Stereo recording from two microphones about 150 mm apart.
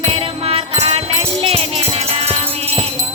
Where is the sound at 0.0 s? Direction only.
40° right (ahead or behind).